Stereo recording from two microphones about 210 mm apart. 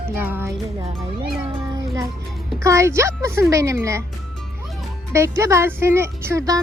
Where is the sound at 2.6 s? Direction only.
15° right (ahead or behind).